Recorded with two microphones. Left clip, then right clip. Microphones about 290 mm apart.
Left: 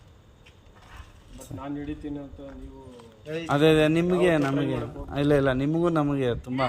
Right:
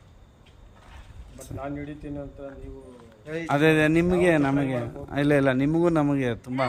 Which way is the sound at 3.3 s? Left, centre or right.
Centre.